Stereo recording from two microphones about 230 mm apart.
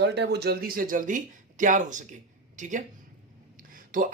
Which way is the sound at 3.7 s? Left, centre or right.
Right.